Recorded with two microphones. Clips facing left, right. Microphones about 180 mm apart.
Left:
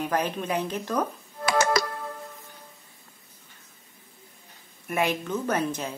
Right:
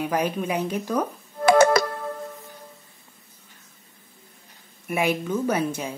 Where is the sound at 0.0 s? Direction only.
10° right (ahead or behind).